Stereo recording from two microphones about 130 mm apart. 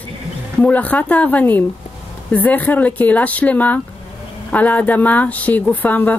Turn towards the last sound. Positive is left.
turn(degrees=10)  # may be behind; listen again after turning